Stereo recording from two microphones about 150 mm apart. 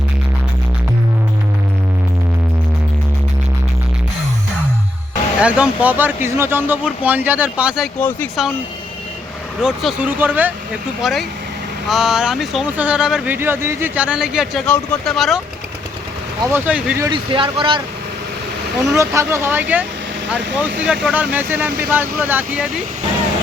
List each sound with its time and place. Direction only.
5.4 s speech: 10° right (ahead or behind)
7.9 s speech: 10° left (ahead or behind)
9.6 s speech: 5° right (ahead or behind)
11.0 s speech: centre (ahead or behind)
16.5 s speech: 10° right (ahead or behind)
17.1 s speech: 35° right (ahead or behind)
18.9 s speech: 20° right (ahead or behind)